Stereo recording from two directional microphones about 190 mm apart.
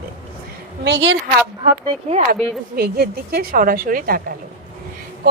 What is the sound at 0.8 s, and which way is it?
Speech, 70° right (ahead or behind).